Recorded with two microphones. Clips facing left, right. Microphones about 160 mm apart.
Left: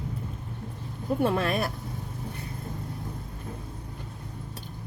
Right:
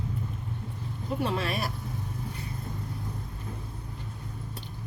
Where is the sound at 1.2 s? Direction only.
50° left (ahead or behind).